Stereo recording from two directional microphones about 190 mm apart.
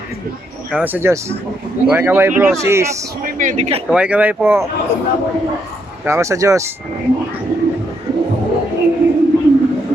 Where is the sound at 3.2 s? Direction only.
45° right (ahead or behind).